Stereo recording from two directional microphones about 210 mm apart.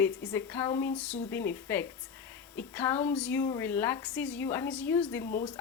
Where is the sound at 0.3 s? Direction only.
10° left (ahead or behind).